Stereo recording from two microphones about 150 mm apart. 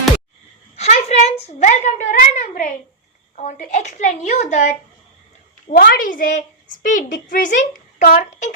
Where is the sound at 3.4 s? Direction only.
55° left (ahead or behind).